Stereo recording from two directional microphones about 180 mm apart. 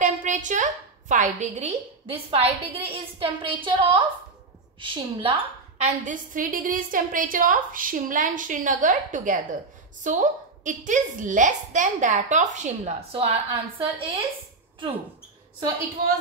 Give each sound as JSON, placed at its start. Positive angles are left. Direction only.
{"t": 0.0, "sound": "a woman's voice", "side_deg": -45}
{"t": 2.3, "sound": "a woman's voice", "side_deg": -30}
{"t": 5.8, "sound": "a woman's voice", "side_deg": -45}